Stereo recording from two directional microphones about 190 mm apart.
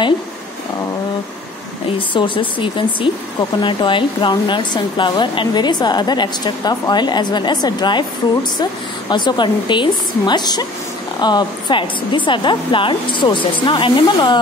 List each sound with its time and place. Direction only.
2.0 s speech: 25° left (ahead or behind)
9.1 s speech: 25° left (ahead or behind)